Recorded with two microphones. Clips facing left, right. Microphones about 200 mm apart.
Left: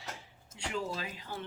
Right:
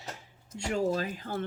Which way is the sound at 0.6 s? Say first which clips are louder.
Right 8 dB; 45° right (ahead or behind).